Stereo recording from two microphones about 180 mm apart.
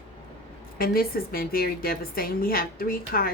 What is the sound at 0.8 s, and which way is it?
A woman's voice, 55° left (ahead or behind).